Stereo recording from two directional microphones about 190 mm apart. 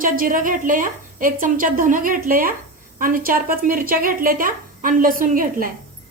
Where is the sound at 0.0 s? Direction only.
45° right (ahead or behind).